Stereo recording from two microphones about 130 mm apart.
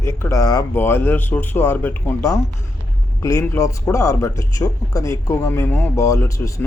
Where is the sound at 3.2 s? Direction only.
25° left (ahead or behind).